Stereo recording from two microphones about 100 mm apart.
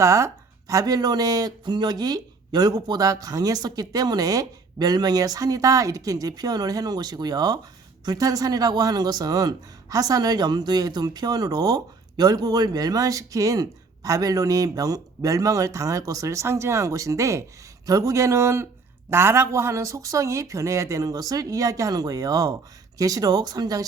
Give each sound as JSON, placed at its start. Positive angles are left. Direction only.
{"t": 0.0, "sound": "speech", "side_deg": -30}